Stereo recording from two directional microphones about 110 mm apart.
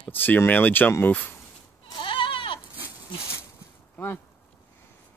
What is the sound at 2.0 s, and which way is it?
Goat, 50° left (ahead or behind).